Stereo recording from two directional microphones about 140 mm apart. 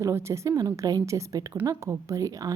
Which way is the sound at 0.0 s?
20° right (ahead or behind).